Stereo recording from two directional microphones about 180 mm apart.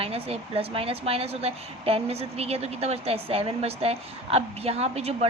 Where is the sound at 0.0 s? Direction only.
35° right (ahead or behind).